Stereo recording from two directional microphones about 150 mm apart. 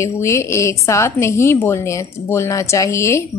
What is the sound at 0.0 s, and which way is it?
A woman's voice, 20° left (ahead or behind).